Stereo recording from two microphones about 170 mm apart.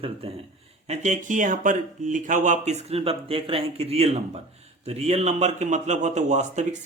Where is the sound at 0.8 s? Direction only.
45° right (ahead or behind).